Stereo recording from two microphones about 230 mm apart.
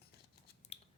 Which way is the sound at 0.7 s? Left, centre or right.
Left.